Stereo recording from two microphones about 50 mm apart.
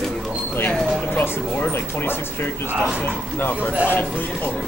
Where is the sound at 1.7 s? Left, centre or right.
Left.